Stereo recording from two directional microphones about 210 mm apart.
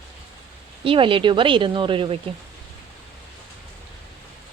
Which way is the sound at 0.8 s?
25° right (ahead or behind).